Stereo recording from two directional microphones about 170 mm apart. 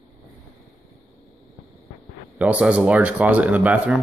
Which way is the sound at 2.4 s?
10° right (ahead or behind).